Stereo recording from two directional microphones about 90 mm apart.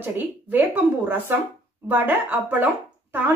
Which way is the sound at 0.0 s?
20° right (ahead or behind).